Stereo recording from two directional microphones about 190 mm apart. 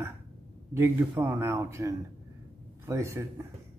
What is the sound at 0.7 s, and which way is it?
Speech, 10° right (ahead or behind).